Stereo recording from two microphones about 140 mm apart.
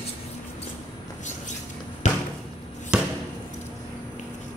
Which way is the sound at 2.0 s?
55° left (ahead or behind).